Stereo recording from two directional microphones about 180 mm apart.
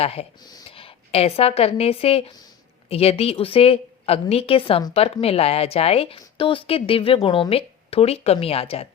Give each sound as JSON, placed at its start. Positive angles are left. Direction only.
{"t": 0.0, "sound": "a woman's voice", "side_deg": 35}